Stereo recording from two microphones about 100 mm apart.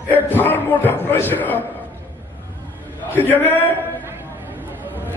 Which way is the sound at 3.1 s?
20° left (ahead or behind).